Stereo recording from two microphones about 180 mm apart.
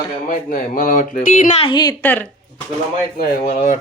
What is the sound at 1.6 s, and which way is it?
Speech, 25° left (ahead or behind).